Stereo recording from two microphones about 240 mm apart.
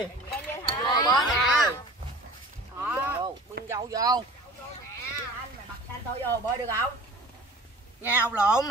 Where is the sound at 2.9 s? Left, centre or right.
Centre.